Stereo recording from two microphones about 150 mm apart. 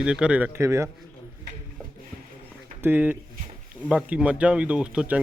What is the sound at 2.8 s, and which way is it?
Speech, 10° right (ahead or behind).